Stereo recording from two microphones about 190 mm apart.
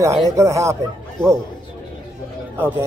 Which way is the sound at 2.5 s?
10° right (ahead or behind).